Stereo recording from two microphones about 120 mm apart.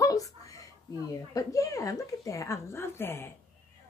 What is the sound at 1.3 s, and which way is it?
A woman's voice, 30° left (ahead or behind).